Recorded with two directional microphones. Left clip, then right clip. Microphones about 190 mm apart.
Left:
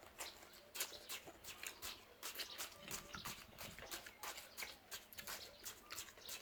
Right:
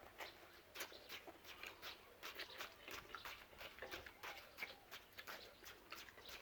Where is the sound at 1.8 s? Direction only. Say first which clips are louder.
Left 2 dB; 5° right (ahead or behind).